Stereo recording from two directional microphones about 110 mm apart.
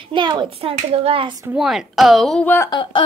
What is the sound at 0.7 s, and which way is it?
Speech, 60° right (ahead or behind).